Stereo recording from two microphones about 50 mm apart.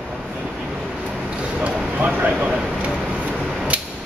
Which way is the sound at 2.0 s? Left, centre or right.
Right.